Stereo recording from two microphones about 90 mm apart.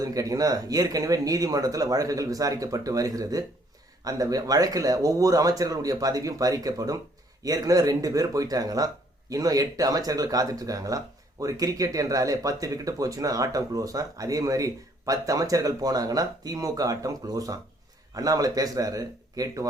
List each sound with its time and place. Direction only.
0.0 s speech: 40° right (ahead or behind)